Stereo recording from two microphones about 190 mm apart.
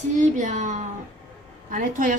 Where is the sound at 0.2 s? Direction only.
40° right (ahead or behind).